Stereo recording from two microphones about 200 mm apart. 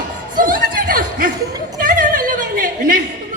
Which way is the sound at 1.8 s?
40° right (ahead or behind).